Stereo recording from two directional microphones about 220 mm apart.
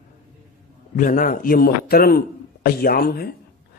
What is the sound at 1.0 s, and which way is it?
A man's voice, 40° left (ahead or behind).